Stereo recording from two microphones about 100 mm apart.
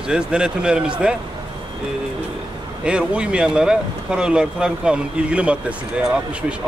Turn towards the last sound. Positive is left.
turn(degrees=-10)  # may be behind; listen again after turning